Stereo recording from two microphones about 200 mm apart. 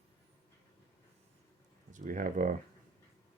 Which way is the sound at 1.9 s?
40° right (ahead or behind).